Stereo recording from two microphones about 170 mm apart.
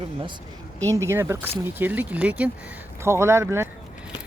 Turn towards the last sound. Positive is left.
turn(degrees=-15)  # may be behind; listen again after turning